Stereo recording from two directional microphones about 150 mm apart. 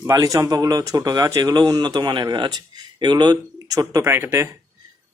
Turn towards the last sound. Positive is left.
turn(degrees=-15)  # may be behind; listen again after turning